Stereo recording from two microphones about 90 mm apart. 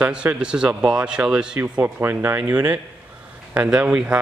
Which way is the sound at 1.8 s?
20° right (ahead or behind).